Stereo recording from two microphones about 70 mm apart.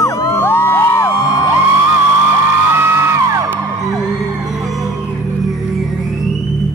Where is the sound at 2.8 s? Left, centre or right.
Right.